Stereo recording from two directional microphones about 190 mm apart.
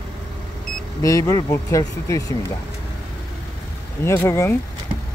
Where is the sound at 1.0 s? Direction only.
15° left (ahead or behind).